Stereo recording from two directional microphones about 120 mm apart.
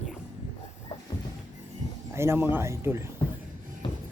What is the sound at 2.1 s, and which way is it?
Speech, 20° right (ahead or behind).